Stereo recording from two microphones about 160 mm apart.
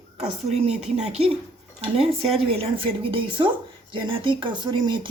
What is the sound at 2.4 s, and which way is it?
A woman's voice, 35° right (ahead or behind).